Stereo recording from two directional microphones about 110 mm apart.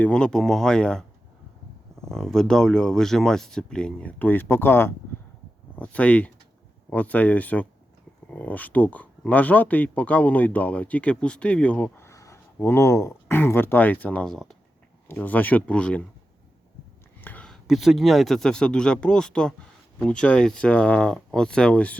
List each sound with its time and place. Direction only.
0.0 s speech: 10° left (ahead or behind)
2.0 s speech: 5° left (ahead or behind)
17.2 s a sound: 15° left (ahead or behind)
17.4 s speech: centre (ahead or behind)